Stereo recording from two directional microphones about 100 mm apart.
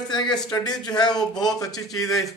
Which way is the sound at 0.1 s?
45° left (ahead or behind).